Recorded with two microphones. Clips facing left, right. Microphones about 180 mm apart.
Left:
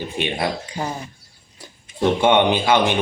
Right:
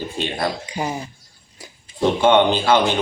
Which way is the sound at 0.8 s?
15° right (ahead or behind).